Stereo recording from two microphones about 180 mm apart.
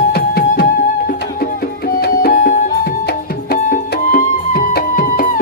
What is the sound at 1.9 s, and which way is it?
Music, 55° left (ahead or behind).